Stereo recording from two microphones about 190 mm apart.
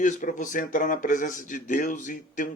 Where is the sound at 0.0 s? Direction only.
40° left (ahead or behind).